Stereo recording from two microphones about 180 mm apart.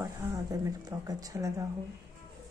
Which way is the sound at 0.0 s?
20° right (ahead or behind).